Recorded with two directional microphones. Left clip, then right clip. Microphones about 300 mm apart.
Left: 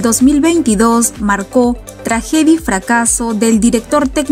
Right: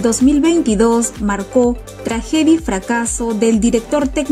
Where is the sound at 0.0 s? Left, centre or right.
Centre.